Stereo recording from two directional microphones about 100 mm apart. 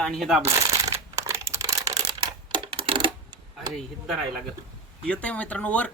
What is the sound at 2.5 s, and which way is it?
Typewriter, 60° right (ahead or behind).